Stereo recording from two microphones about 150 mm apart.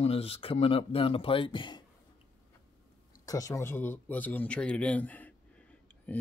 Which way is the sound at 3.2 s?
20° left (ahead or behind).